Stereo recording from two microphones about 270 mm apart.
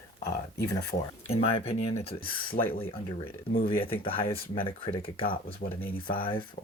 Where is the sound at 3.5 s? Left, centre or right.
Centre.